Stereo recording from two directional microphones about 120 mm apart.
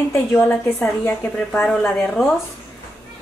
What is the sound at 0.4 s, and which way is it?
A woman's voice, 20° left (ahead or behind).